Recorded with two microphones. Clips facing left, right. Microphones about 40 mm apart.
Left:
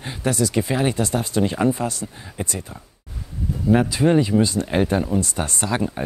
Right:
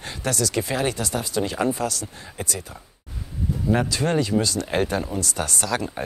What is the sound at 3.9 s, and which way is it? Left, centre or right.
Speech, centre.